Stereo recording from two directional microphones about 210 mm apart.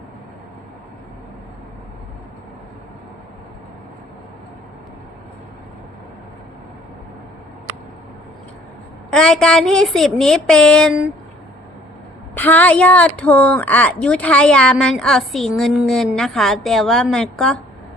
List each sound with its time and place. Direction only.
9.0 s speech: 5° left (ahead or behind)
12.3 s speech: 10° left (ahead or behind)